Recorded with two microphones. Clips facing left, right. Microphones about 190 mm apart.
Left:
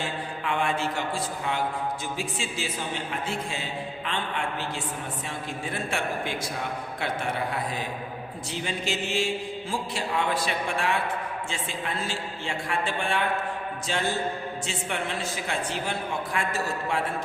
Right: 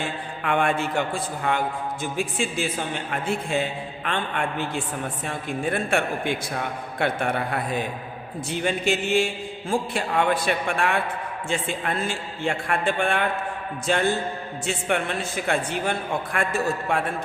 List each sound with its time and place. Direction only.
0.0 s a man's voice: 55° right (ahead or behind)